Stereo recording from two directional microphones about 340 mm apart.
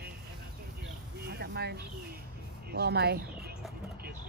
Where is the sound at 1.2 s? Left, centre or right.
Right.